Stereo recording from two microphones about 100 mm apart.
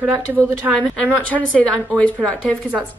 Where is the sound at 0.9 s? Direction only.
15° left (ahead or behind).